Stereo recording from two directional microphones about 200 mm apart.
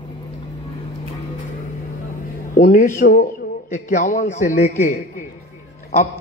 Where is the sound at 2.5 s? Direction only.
40° left (ahead or behind).